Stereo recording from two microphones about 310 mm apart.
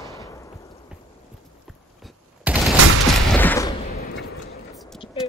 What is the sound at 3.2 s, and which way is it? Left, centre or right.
Fusillade, centre.